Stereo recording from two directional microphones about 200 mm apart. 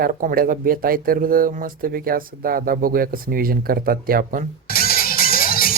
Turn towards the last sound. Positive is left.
turn(degrees=45)  # may be behind; listen again after turning